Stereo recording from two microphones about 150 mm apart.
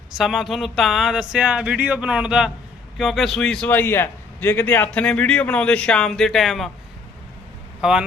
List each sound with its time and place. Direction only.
0.2 s a man's voice: centre (ahead or behind)
7.8 s speech: 5° right (ahead or behind)